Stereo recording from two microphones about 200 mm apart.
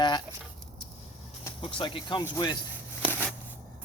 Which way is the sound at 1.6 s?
25° left (ahead or behind).